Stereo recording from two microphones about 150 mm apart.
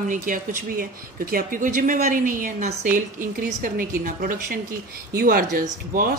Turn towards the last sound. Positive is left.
turn(degrees=-70)  # may be behind; listen again after turning